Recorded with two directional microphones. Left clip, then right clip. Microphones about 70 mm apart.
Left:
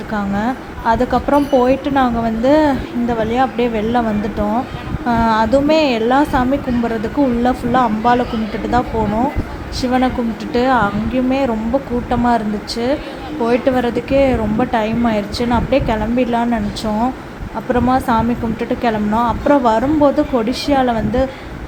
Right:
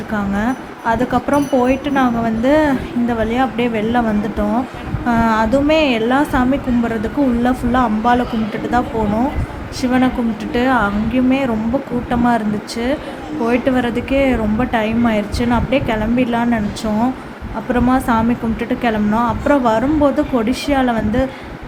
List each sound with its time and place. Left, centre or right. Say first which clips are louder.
0.1 s speech: even; left
4.0 s speech: even; left
7.4 s speech: left 1 dB; left
17.7 s speech: left 1 dB; left